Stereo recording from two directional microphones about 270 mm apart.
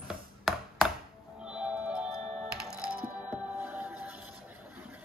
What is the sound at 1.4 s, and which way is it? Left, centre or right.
Music, centre.